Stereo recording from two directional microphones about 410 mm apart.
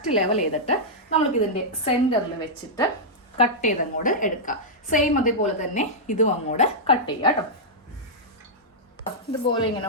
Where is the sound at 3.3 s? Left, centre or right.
Centre.